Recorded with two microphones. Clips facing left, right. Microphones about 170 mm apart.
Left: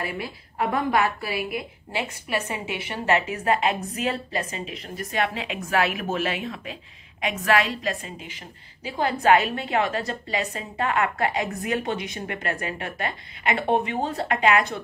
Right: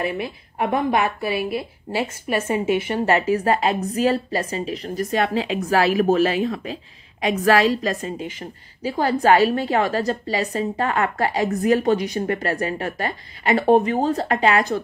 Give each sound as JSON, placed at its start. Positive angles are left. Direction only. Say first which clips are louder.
{"t": 0.0, "sound": "a woman's voice", "louder": "right 6 dB", "side_deg": -20}